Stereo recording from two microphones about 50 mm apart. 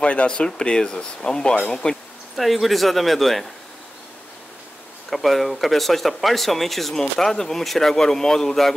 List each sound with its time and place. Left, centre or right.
0.0 s speech: left
2.3 s speech: centre
5.1 s speech: centre